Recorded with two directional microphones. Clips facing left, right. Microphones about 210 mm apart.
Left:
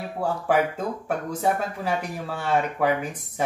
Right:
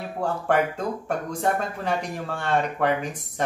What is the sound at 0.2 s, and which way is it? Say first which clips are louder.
Speech: even; 5° left (ahead or behind).